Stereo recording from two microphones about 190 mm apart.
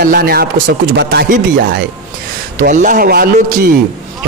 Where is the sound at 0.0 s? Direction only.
50° right (ahead or behind).